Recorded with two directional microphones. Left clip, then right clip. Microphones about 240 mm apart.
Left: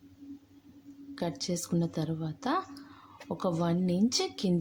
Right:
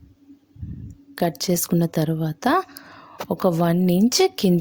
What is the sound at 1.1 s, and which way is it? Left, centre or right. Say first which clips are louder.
Speech: right 12 dB; right.